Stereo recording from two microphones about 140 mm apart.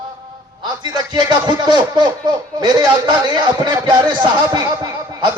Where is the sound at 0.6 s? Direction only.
30° right (ahead or behind).